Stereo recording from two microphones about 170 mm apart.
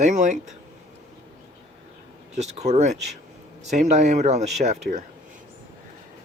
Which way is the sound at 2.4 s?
40° right (ahead or behind).